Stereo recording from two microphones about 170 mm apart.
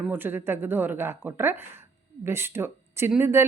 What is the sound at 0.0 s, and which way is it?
Speech, 10° right (ahead or behind).